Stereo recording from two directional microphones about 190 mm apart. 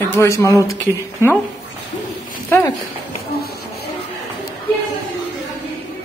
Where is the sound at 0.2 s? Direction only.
15° left (ahead or behind).